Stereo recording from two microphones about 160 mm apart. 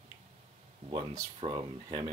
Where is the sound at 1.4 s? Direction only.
25° right (ahead or behind).